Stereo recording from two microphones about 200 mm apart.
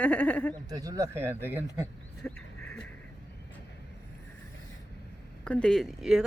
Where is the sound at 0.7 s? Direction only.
20° right (ahead or behind).